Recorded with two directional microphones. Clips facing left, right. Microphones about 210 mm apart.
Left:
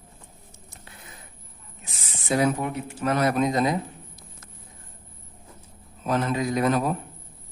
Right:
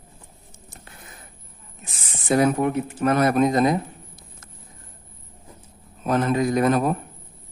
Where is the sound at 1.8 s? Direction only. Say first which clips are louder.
Right 5 dB; 50° right (ahead or behind).